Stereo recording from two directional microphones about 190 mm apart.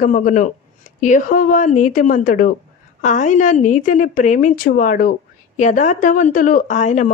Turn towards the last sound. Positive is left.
turn(degrees=40)  # may be behind; listen again after turning